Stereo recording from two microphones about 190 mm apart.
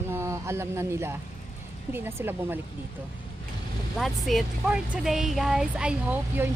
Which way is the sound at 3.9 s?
Centre (ahead or behind).